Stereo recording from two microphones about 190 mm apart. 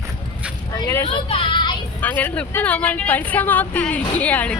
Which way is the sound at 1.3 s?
25° left (ahead or behind).